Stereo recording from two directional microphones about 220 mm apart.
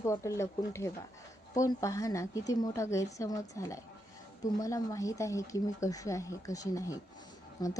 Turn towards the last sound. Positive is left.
turn(degrees=20)  # may be behind; listen again after turning